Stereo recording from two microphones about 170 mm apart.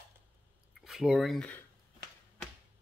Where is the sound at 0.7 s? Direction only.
Centre (ahead or behind).